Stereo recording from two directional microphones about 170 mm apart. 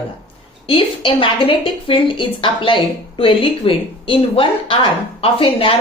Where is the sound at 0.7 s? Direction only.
30° left (ahead or behind).